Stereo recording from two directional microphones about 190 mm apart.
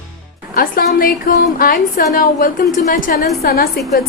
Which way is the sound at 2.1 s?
50° left (ahead or behind).